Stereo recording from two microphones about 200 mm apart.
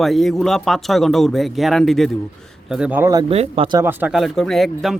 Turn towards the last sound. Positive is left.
turn(degrees=0)  # may be behind; listen again after turning